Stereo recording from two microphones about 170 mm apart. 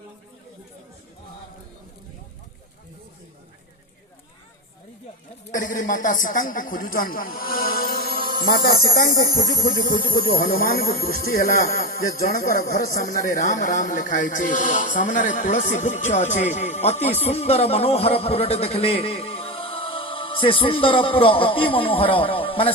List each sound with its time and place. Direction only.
5.5 s speech: 50° left (ahead or behind)
8.4 s music: 65° left (ahead or behind)
10.1 s speech: 60° left (ahead or behind); by 22.7 s 30° left (ahead or behind)